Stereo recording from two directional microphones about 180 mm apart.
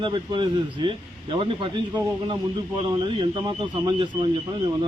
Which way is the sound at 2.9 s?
25° right (ahead or behind).